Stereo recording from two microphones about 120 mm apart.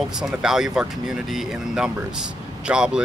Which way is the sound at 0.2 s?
5° right (ahead or behind).